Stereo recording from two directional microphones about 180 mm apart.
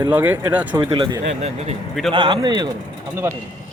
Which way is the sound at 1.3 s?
35° right (ahead or behind).